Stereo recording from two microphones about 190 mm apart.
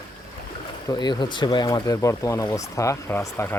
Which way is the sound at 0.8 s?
20° left (ahead or behind).